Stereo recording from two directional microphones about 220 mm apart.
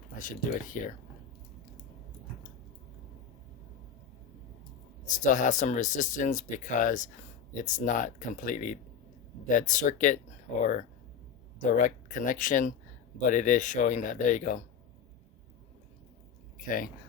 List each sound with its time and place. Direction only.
0.2 s speech: 35° left (ahead or behind)
5.0 s speech: 35° left (ahead or behind)
16.6 s speech: 40° left (ahead or behind)